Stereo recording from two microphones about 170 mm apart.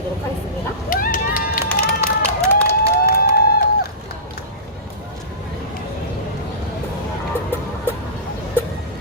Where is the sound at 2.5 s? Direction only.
10° left (ahead or behind).